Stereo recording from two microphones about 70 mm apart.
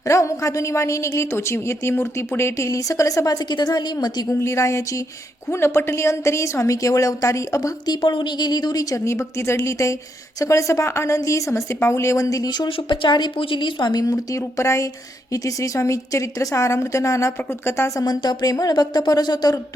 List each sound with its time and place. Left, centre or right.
0.1 s a woman's voice: left
3.5 s speech: left
4.3 s a woman's voice: left
5.5 s a woman's voice: left
7.9 s a woman's voice: left
9.0 s a woman's voice: left
13.1 s a woman's voice: left
14.1 s a woman's voice: left
18.0 s speech: left